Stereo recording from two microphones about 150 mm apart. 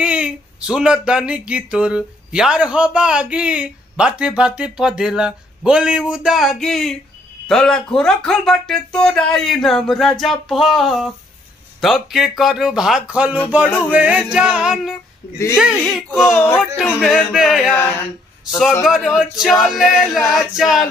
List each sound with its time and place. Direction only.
0.0 s speech: 5° right (ahead or behind)
16.1 s speech: 15° left (ahead or behind)
16.5 s speech: centre (ahead or behind)
17.6 s speech: 15° left (ahead or behind)
18.9 s speech: 5° right (ahead or behind)